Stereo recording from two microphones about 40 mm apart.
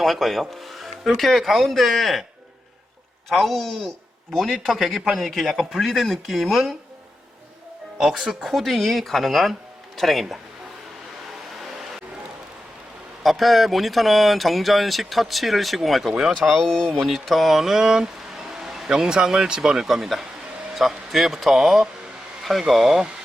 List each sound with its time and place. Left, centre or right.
0.0 s speech: centre
3.2 s a man's voice: centre
8.4 s speech: centre
13.2 s speech: centre
16.6 s speech: centre
17.1 s speech: centre
18.5 s a sound: centre
18.9 s speech: centre